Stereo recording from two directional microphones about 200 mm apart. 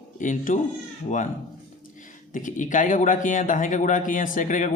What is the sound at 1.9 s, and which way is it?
Speech, 40° left (ahead or behind).